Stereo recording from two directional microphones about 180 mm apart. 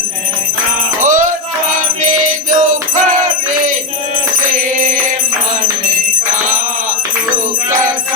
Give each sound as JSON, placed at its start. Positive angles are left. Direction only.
{"t": 1.0, "sound": "music", "side_deg": -45}
{"t": 2.5, "sound": "music", "side_deg": -45}